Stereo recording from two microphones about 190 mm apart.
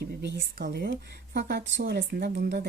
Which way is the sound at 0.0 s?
65° right (ahead or behind).